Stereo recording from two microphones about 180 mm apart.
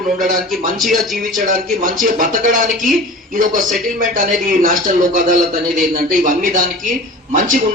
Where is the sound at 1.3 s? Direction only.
50° right (ahead or behind).